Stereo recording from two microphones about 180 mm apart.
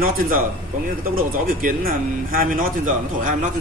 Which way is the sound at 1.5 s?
50° right (ahead or behind).